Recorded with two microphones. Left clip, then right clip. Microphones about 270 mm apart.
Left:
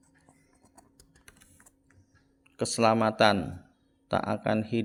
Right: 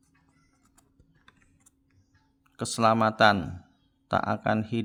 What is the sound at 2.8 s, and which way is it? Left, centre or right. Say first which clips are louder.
Speech: right 2 dB; right.